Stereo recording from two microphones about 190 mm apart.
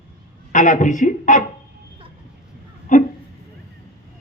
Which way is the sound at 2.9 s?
45° left (ahead or behind).